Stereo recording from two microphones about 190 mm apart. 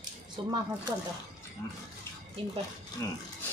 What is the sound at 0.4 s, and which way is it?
Speech, 25° right (ahead or behind).